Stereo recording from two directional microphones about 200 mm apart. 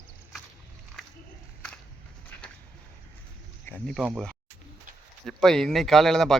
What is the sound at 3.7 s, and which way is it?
Speech, centre (ahead or behind).